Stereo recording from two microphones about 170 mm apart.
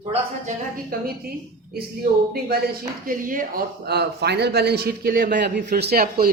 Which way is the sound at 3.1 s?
55° right (ahead or behind).